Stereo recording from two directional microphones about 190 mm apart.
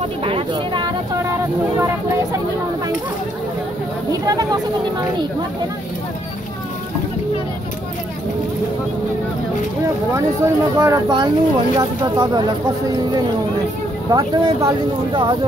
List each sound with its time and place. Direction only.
0.2 s speech: 25° right (ahead or behind)
4.1 s speech: 20° right (ahead or behind)
10.1 s speech: 15° right (ahead or behind)
14.1 s speech: 20° right (ahead or behind)